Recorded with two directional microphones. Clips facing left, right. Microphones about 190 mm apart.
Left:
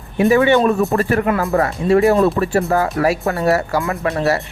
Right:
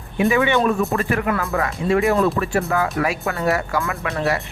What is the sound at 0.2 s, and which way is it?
Speech, 40° left (ahead or behind).